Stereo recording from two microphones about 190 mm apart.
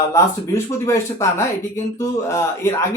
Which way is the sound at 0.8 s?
15° left (ahead or behind).